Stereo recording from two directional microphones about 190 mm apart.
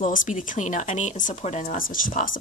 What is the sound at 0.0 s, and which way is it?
Speech, 45° left (ahead or behind).